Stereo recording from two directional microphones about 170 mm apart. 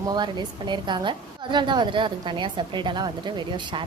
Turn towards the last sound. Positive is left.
turn(degrees=-25)  # may be behind; listen again after turning